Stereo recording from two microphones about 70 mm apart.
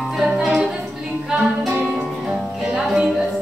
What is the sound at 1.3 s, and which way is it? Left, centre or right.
Music, centre.